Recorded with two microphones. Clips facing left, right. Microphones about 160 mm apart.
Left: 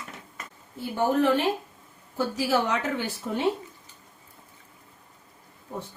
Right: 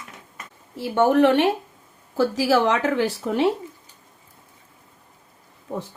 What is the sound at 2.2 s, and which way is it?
A woman's voice, 90° right.